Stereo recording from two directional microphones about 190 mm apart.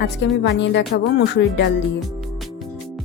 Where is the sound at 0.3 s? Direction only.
65° left (ahead or behind).